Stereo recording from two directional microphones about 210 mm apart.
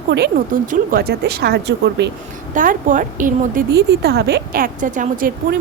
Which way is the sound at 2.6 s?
40° right (ahead or behind).